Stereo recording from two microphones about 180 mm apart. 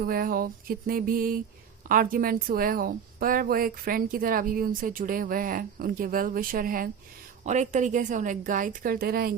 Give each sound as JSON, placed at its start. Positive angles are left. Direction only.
{"t": 0.0, "sound": "a woman's voice", "side_deg": -55}
{"t": 7.4, "sound": "a woman's voice", "side_deg": -40}